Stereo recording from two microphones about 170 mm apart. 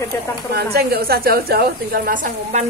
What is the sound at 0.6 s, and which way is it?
A woman's voice, 65° right (ahead or behind).